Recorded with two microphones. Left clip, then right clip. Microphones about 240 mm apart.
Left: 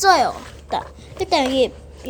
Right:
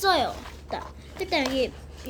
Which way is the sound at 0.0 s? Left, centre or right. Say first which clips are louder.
Left 8 dB; left.